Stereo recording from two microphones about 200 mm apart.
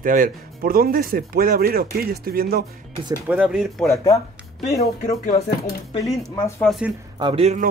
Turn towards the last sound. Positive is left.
turn(degrees=-30)  # may be behind; listen again after turning